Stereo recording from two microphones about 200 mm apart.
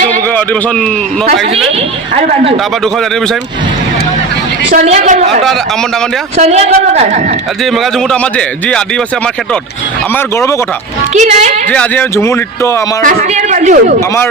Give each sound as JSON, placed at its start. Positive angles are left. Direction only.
{"t": 2.1, "sound": "a man's voice", "side_deg": -30}
{"t": 4.7, "sound": "a man's voice", "side_deg": -40}
{"t": 6.3, "sound": "a man's voice", "side_deg": -35}
{"t": 8.1, "sound": "a man's voice", "side_deg": 5}
{"t": 11.1, "sound": "a man's voice", "side_deg": -35}
{"t": 11.7, "sound": "speech", "side_deg": 5}
{"t": 13.0, "sound": "a man's voice", "side_deg": -40}